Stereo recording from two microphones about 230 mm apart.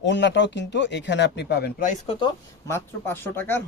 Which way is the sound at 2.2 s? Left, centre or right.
Centre.